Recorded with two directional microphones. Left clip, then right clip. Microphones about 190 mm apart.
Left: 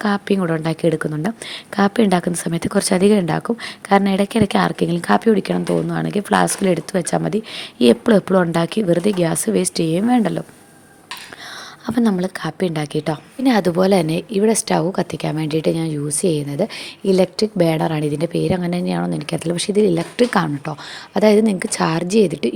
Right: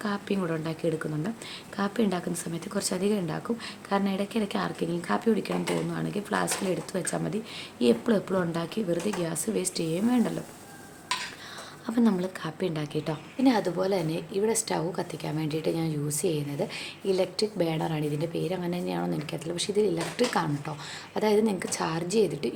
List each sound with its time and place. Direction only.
0.0 s a woman's voice: 40° left (ahead or behind)
11.9 s a woman's voice: 35° left (ahead or behind)